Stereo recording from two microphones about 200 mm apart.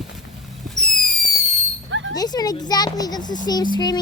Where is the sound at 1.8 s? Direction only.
70° right (ahead or behind).